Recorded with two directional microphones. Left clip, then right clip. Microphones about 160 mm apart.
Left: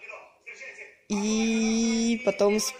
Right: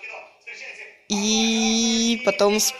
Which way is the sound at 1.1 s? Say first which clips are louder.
Right 6 dB; 15° left (ahead or behind).